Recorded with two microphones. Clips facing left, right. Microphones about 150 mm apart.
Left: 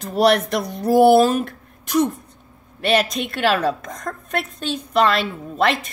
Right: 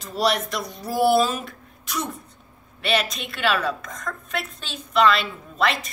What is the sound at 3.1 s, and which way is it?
Speech, 55° left (ahead or behind).